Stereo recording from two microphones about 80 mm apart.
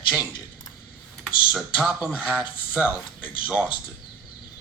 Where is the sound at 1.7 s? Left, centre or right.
Centre.